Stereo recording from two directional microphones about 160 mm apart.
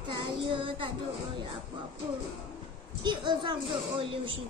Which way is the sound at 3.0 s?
30° right (ahead or behind).